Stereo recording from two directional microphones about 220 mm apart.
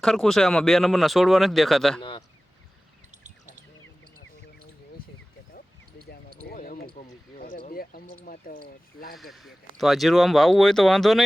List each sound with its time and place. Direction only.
0.0 s speech: centre (ahead or behind)
2.0 s speech: 20° left (ahead or behind)
3.2 s bird: 35° right (ahead or behind)
6.1 s basketball bounce: 40° left (ahead or behind)
7.7 s a sound: 40° left (ahead or behind)
9.1 s speech: centre (ahead or behind)